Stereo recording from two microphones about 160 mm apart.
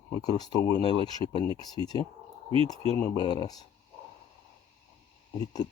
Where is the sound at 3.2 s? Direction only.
30° left (ahead or behind).